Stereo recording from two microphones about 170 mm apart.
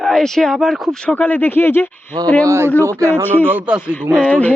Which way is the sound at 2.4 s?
15° right (ahead or behind).